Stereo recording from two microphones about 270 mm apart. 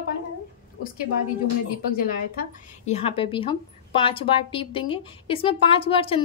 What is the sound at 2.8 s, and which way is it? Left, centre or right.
A woman's voice, left.